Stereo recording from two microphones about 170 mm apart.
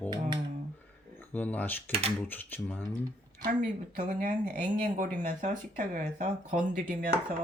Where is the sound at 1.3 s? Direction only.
10° left (ahead or behind).